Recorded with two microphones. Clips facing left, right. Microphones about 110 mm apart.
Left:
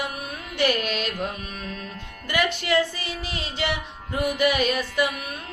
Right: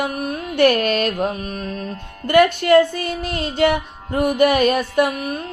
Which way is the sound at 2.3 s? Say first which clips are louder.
Right 11 dB; 50° right (ahead or behind).